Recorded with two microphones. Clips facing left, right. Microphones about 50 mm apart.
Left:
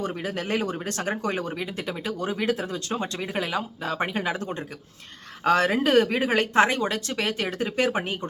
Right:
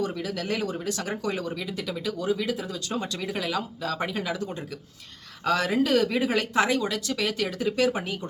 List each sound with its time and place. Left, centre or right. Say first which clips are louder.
0.0 s speech: even; left
2.9 s speech: even; left